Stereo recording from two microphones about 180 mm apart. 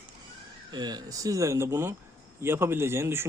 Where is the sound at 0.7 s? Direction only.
25° right (ahead or behind).